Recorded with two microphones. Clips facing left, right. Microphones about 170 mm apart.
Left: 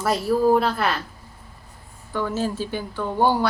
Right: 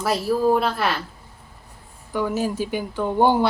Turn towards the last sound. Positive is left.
turn(degrees=-20)  # may be behind; listen again after turning